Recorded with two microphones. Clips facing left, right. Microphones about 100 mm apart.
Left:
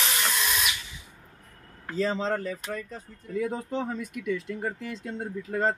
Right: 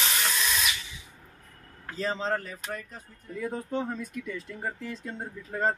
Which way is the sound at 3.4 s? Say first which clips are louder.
Even; 90° left.